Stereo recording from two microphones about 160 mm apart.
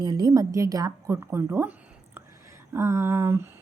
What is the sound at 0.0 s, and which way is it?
A woman's voice, 25° right (ahead or behind).